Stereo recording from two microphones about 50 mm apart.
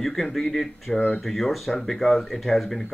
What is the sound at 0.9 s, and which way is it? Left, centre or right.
Speech, left.